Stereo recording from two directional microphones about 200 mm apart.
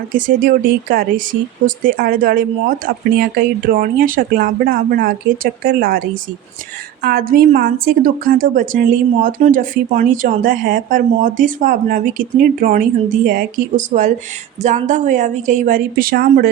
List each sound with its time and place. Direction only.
0.1 s a woman's voice: 40° right (ahead or behind)